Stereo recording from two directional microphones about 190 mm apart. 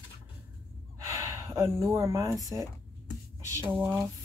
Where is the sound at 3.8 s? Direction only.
5° right (ahead or behind).